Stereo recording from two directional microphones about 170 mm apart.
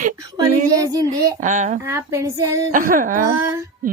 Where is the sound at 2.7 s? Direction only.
50° right (ahead or behind).